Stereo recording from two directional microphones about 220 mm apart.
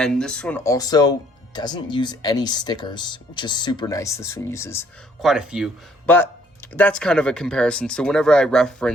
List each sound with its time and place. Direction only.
0.0 s speech: 5° left (ahead or behind)
5.2 s speech: 5° right (ahead or behind)
6.7 s speech: 5° left (ahead or behind)